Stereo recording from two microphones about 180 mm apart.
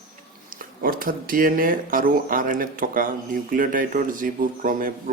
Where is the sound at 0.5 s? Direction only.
50° right (ahead or behind).